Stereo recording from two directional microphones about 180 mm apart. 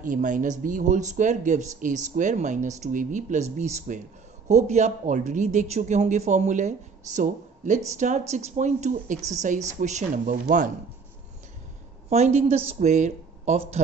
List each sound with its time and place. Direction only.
0.0 s speech: 45° right (ahead or behind)
12.1 s speech: 40° right (ahead or behind)